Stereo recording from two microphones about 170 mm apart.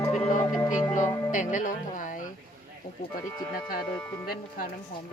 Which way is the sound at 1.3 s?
50° left (ahead or behind).